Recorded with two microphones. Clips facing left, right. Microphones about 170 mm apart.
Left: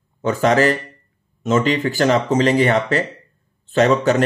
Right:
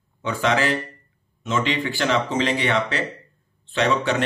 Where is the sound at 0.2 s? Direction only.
45° left (ahead or behind).